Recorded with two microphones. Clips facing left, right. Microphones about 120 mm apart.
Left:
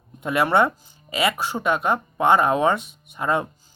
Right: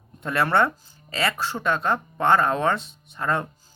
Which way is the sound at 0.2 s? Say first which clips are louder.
Left 2 dB; 15° left (ahead or behind).